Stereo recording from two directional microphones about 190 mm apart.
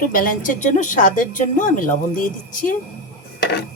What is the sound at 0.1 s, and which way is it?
Speech, 45° left (ahead or behind).